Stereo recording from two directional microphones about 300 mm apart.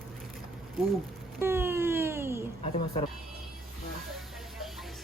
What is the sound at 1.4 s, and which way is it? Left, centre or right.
Speech, centre.